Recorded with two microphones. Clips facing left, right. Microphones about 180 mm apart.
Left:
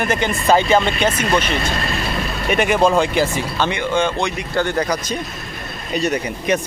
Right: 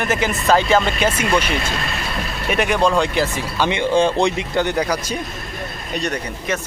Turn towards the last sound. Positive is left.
turn(degrees=15)  # may be behind; listen again after turning